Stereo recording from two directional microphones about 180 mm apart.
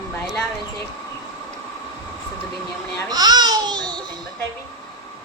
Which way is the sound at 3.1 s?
20° right (ahead or behind).